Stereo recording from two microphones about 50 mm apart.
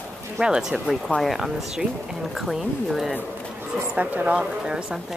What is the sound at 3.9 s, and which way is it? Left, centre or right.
Speech, right.